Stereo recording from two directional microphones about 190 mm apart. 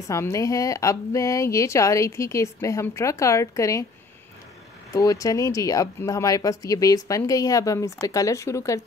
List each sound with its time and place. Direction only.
0.1 s speech: 15° left (ahead or behind)
4.9 s speech: 15° left (ahead or behind)